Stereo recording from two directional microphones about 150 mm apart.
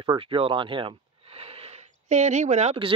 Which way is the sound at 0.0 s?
30° right (ahead or behind).